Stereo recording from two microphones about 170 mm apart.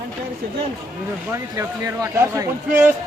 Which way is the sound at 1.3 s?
20° right (ahead or behind).